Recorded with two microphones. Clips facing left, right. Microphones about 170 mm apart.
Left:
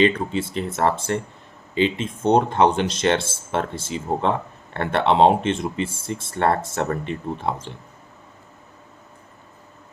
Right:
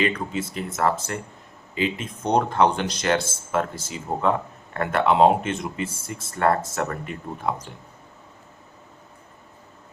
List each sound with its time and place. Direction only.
0.0 s speech: 30° left (ahead or behind)